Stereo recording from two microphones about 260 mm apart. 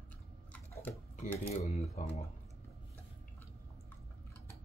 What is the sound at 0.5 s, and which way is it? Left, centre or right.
Stir, centre.